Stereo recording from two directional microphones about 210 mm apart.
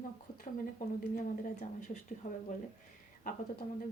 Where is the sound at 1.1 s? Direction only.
40° left (ahead or behind).